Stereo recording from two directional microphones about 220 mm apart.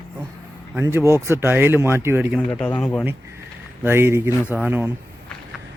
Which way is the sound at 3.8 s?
10° right (ahead or behind).